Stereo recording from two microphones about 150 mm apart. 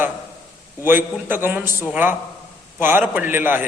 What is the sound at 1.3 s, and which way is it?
A man's voice, 15° right (ahead or behind).